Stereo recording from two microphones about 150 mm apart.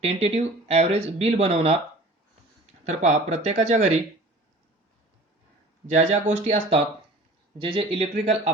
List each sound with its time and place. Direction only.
0.0 s speech: 45° right (ahead or behind)
2.8 s speech: 55° right (ahead or behind)
5.9 s speech: 50° right (ahead or behind)